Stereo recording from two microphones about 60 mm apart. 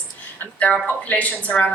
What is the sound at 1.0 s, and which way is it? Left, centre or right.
Speech, left.